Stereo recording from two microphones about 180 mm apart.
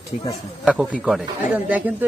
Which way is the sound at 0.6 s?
5° right (ahead or behind).